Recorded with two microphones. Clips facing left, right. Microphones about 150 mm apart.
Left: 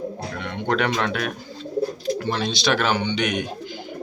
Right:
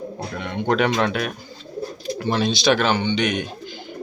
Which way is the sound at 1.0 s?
5° right (ahead or behind).